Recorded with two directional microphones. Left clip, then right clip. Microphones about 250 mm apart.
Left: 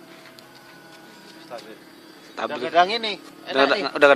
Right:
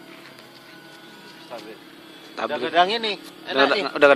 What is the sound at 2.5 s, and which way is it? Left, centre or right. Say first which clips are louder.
Speech: even; left.